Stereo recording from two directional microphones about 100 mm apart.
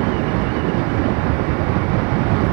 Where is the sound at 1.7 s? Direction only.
25° right (ahead or behind).